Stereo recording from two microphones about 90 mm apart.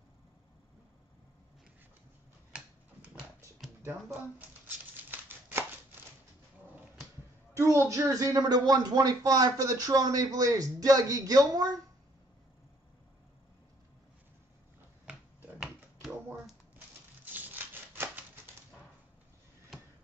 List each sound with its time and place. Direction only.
3.8 s shuffling cards: 25° right (ahead or behind)
7.5 s speech: 30° right (ahead or behind)
15.0 s a sound: 10° right (ahead or behind)
16.3 s crumpling: 20° right (ahead or behind)